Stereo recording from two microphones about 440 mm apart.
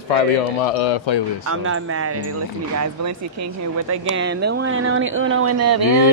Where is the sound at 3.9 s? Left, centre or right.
Right.